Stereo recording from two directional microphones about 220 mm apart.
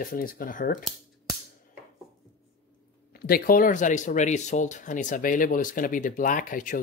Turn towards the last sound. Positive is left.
turn(degrees=35)  # may be behind; listen again after turning